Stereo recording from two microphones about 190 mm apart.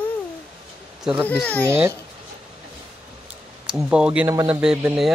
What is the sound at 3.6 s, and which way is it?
Speech, 5° right (ahead or behind).